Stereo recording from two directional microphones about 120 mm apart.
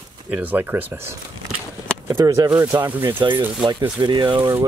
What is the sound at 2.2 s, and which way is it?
Speech, 30° right (ahead or behind).